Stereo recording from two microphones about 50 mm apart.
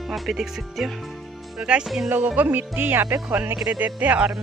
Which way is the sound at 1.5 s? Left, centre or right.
Centre.